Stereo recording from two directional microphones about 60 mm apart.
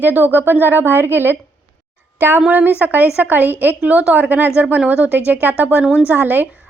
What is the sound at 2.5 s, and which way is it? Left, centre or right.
A woman's voice, right.